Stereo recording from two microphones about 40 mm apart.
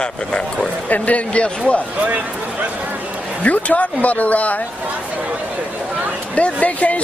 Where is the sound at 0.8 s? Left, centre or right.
Left.